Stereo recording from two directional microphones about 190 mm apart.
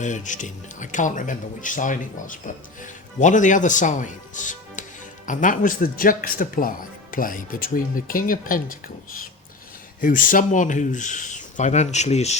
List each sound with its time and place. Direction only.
0.0 s a man's voice: 40° left (ahead or behind)
10.0 s speech: 45° left (ahead or behind)